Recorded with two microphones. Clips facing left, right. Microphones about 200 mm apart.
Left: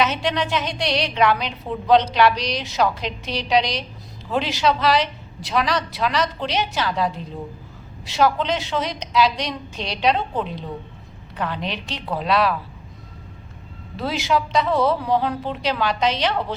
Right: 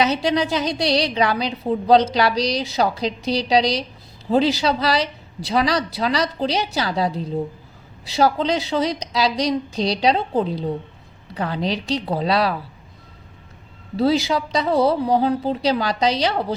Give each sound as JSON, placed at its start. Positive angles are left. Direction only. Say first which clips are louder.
{"t": 0.0, "sound": "a woman's voice", "louder": "right 3 dB", "side_deg": -35}
{"t": 13.9, "sound": "a woman's voice", "louder": "right 4 dB", "side_deg": -35}